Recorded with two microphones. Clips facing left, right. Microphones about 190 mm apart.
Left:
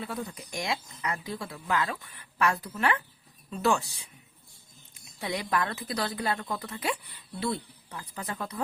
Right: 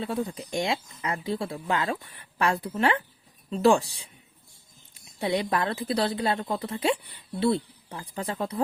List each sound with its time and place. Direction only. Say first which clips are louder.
0.0 s a woman's voice: right 6 dB; 25° right (ahead or behind)
5.2 s a woman's voice: right 4 dB; 30° right (ahead or behind)